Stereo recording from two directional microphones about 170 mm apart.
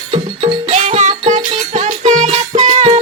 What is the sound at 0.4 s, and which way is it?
Music, 40° right (ahead or behind).